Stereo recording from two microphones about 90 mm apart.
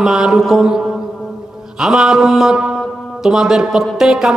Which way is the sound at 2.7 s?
5° right (ahead or behind).